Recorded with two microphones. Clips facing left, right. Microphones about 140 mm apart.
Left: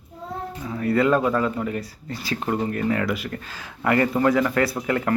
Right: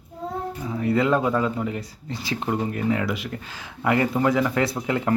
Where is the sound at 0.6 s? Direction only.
15° right (ahead or behind).